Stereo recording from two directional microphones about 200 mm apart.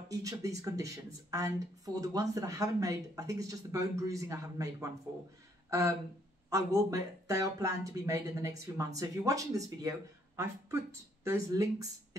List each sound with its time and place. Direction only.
0.1 s speech: 15° right (ahead or behind)